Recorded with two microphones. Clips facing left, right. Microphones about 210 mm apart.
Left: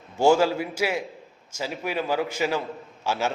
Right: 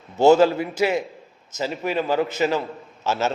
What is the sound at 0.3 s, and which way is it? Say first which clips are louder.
A man's voice: right 5 dB; 10° left (ahead or behind).